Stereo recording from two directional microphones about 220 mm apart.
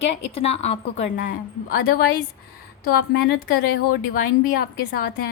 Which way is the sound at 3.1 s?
45° left (ahead or behind).